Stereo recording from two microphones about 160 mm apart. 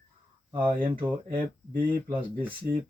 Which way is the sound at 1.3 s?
30° right (ahead or behind).